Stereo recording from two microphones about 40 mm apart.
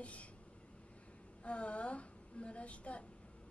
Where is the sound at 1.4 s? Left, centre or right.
Left.